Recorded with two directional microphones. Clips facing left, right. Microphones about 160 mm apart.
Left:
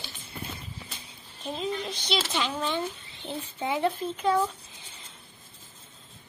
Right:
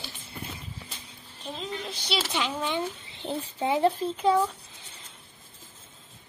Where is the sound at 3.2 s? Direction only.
30° right (ahead or behind).